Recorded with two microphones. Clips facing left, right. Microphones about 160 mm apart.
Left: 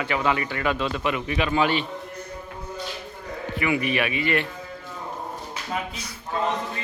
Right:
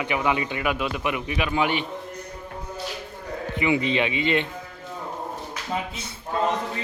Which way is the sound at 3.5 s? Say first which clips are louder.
Right 1 dB; 20° right (ahead or behind).